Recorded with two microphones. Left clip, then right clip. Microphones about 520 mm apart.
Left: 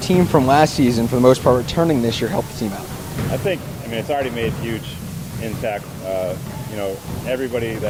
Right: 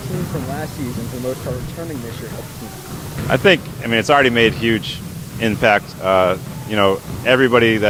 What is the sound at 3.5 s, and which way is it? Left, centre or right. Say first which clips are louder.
Speech: right 9 dB; right.